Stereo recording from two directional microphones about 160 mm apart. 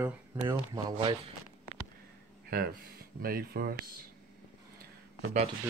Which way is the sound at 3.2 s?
70° right (ahead or behind).